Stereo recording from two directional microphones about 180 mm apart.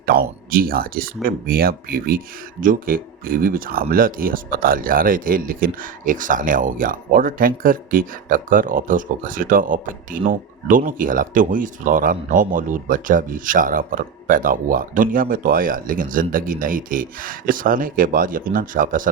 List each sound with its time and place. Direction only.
0.0 s speech: 55° right (ahead or behind)